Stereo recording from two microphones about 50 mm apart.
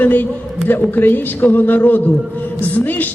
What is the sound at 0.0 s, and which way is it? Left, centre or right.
A man's voice, left.